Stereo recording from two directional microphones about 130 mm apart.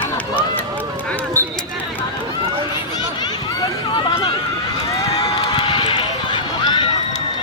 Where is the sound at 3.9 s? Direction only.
35° left (ahead or behind).